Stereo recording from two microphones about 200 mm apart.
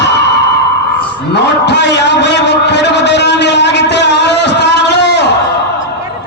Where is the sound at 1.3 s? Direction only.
60° left (ahead or behind).